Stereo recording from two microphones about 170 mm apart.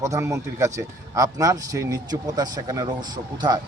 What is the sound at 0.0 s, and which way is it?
Speech, 15° right (ahead or behind).